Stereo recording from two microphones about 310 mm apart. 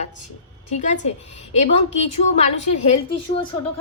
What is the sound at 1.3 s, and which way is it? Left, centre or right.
A woman's voice, left.